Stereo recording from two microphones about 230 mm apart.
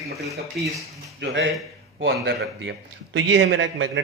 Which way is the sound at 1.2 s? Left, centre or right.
Right.